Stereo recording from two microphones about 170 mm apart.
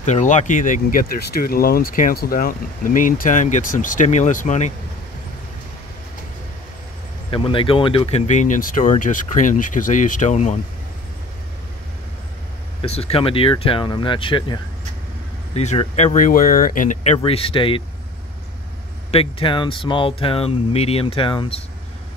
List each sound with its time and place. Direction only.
0.0 s speech: 45° left (ahead or behind)
7.2 s speech: 30° left (ahead or behind)
12.8 s speech: 35° left (ahead or behind)
15.5 s speech: 40° left (ahead or behind)
17.2 s speech: 35° left (ahead or behind)
19.0 s speech: 35° left (ahead or behind)